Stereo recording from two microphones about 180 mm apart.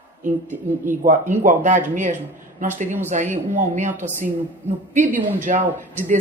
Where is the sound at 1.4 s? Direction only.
45° right (ahead or behind).